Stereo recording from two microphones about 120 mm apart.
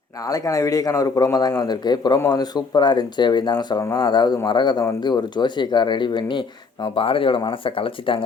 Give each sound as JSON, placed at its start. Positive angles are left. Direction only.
{"t": 0.3, "sound": "a man's voice", "side_deg": 30}